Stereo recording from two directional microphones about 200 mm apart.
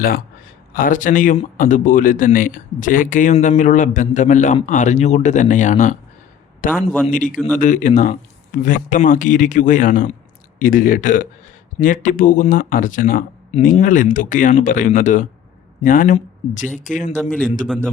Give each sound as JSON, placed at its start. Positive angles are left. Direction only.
{"t": 0.7, "sound": "speech", "side_deg": 45}
{"t": 6.8, "sound": "a man's voice", "side_deg": 5}
{"t": 7.1, "sound": "speech", "side_deg": 40}
{"t": 17.2, "sound": "a man's voice", "side_deg": 5}